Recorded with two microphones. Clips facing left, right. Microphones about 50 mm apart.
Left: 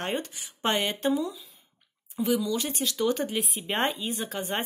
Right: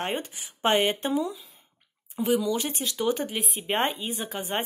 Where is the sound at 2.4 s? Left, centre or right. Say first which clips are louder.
Right 1 dB; centre.